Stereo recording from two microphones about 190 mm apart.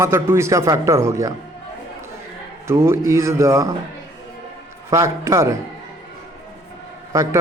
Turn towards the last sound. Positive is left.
turn(degrees=-15)  # may be behind; listen again after turning